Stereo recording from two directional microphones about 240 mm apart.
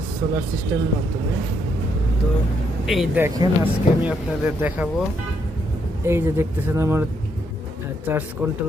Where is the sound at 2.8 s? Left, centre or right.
Centre.